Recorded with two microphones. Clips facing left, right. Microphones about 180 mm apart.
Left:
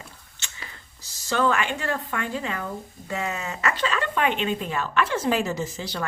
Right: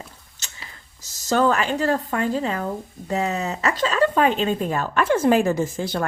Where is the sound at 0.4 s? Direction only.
40° right (ahead or behind).